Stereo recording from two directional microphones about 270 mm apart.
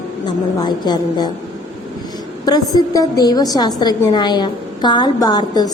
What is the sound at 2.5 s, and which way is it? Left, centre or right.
A woman's voice, centre.